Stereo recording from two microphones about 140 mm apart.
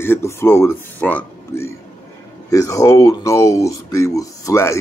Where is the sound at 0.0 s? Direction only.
20° left (ahead or behind).